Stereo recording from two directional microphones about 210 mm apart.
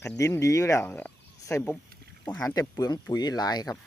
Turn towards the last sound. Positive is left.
turn(degrees=20)  # may be behind; listen again after turning